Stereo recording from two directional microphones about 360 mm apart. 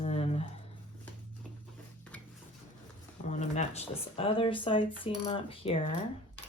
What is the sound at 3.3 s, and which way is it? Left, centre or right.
Speech, centre.